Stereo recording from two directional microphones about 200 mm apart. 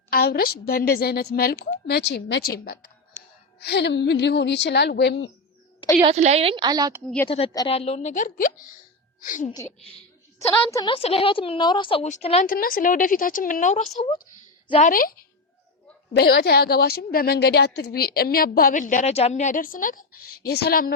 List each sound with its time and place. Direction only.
0.1 s a woman's voice: 50° left (ahead or behind)
6.1 s a woman's voice: 35° right (ahead or behind)
7.3 s a woman's voice: 25° left (ahead or behind)
10.7 s a woman's voice: 20° left (ahead or behind)
12.5 s a woman's voice: 45° left (ahead or behind)
16.1 s a woman's voice: 50° left (ahead or behind)